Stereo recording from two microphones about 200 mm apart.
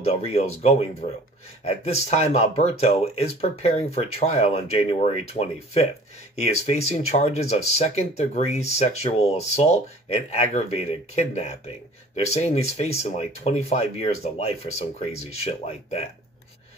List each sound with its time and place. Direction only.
0.0 s speech: 30° left (ahead or behind)